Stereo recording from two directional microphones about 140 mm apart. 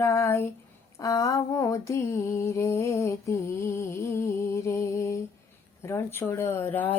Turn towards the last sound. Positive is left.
turn(degrees=10)  # may be behind; listen again after turning